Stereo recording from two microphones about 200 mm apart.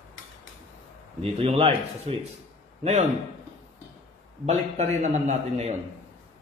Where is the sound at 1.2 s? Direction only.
30° right (ahead or behind).